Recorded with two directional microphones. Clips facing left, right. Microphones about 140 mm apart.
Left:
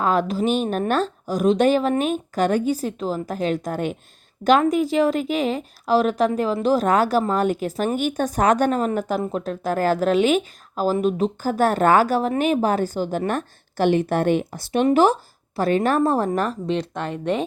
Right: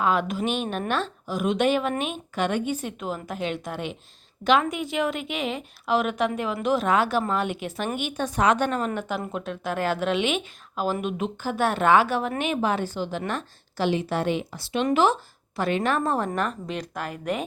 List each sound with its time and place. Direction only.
0.0 s a woman's voice: 40° left (ahead or behind)